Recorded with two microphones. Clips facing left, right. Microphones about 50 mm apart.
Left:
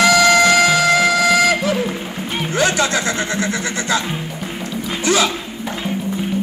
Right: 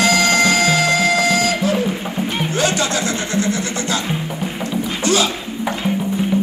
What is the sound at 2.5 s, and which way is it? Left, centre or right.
Music, left.